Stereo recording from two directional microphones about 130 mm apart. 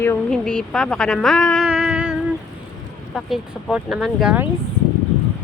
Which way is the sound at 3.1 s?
Centre (ahead or behind).